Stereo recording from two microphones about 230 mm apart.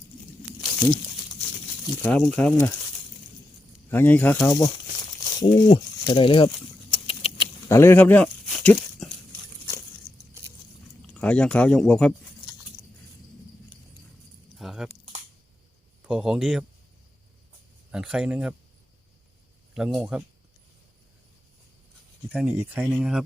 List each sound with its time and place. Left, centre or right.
2.0 s speech: centre
3.8 s speech: centre
5.2 s crumpling: centre
5.6 s speech: left
6.9 s keys jangling: left
7.7 s speech: centre
11.1 s speech: centre
14.5 s keys jangling: centre
16.0 s speech: centre
17.9 s speech: centre
19.7 s speech: centre
22.3 s speech: centre